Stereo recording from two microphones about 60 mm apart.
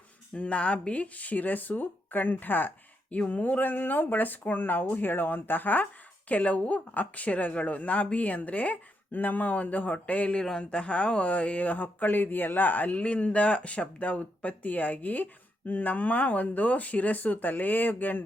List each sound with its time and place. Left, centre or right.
0.3 s speech: left